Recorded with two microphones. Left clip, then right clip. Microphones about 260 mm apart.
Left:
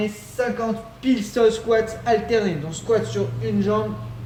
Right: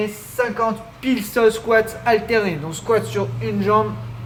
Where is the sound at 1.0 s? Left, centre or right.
Centre.